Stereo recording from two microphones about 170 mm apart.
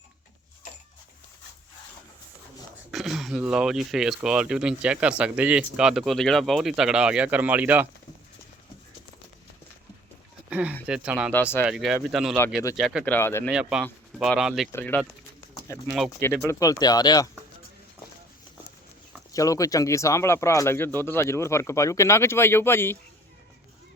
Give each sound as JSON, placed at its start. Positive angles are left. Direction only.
{"t": 2.9, "sound": "speech", "side_deg": 0}
{"t": 10.5, "sound": "speech", "side_deg": -10}
{"t": 13.1, "sound": "speech", "side_deg": 15}
{"t": 13.5, "sound": "speech", "side_deg": -5}
{"t": 14.7, "sound": "speech", "side_deg": 10}
{"t": 15.9, "sound": "speech", "side_deg": 0}
{"t": 16.5, "sound": "speech", "side_deg": 20}
{"t": 19.3, "sound": "speech", "side_deg": 20}